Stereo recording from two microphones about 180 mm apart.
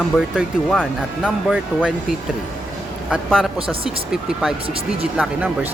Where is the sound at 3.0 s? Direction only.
Centre (ahead or behind).